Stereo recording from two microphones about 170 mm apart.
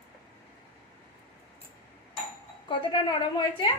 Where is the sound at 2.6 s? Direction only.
30° left (ahead or behind).